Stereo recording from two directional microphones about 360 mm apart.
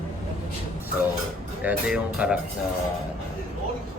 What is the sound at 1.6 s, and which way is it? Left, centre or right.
Speech, centre.